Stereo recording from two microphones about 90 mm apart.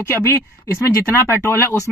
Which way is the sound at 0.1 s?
25° left (ahead or behind).